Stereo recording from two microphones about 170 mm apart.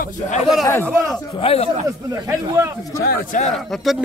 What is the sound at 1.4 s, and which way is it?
Speech, 30° left (ahead or behind).